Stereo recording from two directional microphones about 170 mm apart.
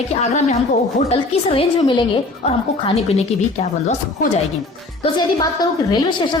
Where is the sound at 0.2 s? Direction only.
45° left (ahead or behind).